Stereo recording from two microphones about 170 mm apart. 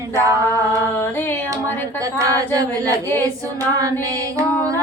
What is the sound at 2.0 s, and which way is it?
Female singing, 20° right (ahead or behind).